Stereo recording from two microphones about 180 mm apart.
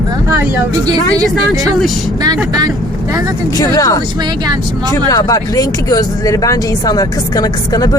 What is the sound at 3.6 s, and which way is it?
Speech, 20° left (ahead or behind).